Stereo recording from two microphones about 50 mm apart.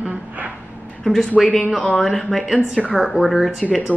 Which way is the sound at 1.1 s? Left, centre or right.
Left.